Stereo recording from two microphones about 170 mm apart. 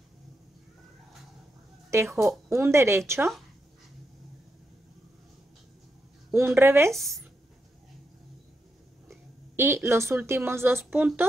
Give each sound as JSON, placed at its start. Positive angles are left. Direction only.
{"t": 1.9, "sound": "speech", "side_deg": -15}
{"t": 6.3, "sound": "speech", "side_deg": -15}
{"t": 7.0, "sound": "speech", "side_deg": 0}
{"t": 9.1, "sound": "a woman's voice", "side_deg": -15}